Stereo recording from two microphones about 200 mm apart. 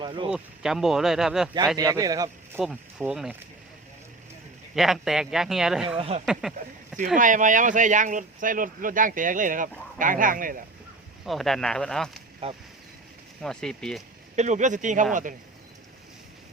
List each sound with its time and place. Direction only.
0.0 s speech: 25° right (ahead or behind)
0.3 s speech: 5° right (ahead or behind)
1.7 s speech: 15° right (ahead or behind)
2.6 s speech: 5° right (ahead or behind)
4.7 s speech: centre (ahead or behind)
6.0 s speech: 30° right (ahead or behind)
6.4 s speech: centre (ahead or behind)
7.2 s speech: 40° right (ahead or behind)
11.3 s speech: centre (ahead or behind)
12.4 s speech: 30° right (ahead or behind)
13.4 s speech: 5° left (ahead or behind)
14.3 s speech: 35° right (ahead or behind)